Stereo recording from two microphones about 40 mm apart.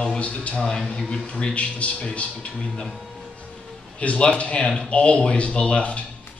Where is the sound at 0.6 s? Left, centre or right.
Centre; by 2.0 s left.